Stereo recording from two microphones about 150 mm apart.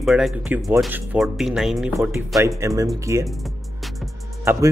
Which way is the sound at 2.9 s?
20° right (ahead or behind).